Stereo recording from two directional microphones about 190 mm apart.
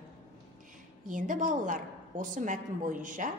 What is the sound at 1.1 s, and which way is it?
A woman's voice, 40° right (ahead or behind).